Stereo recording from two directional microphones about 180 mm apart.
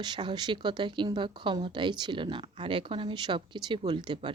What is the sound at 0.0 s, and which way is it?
Speech, 25° right (ahead or behind).